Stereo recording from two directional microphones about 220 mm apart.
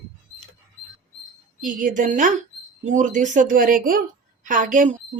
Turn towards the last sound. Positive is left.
turn(degrees=-35)  # may be behind; listen again after turning